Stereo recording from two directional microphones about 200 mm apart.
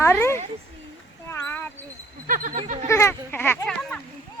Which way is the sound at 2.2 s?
45° right (ahead or behind).